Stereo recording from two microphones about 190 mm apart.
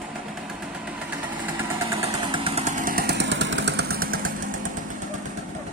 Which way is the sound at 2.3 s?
30° right (ahead or behind).